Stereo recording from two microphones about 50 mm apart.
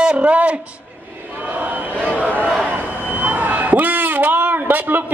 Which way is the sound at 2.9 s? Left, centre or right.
Left.